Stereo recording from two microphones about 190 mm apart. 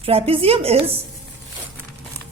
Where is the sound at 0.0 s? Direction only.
30° right (ahead or behind).